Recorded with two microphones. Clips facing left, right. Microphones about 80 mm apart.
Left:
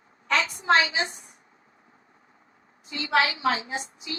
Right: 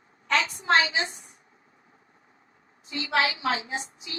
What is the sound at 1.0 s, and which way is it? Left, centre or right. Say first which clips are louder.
Speech: even; left.